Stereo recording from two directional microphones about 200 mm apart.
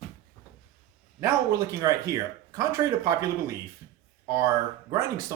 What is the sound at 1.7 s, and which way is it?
Speech, 15° right (ahead or behind).